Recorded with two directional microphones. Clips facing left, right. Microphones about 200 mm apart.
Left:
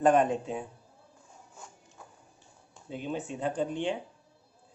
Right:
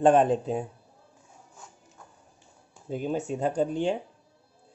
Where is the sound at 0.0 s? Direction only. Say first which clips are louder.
Right 4 dB; 30° right (ahead or behind).